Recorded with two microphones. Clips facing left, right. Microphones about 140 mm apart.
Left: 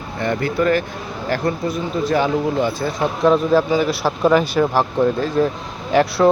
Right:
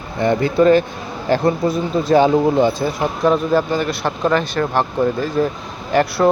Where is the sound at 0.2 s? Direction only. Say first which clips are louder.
Right 5 dB; 20° right (ahead or behind).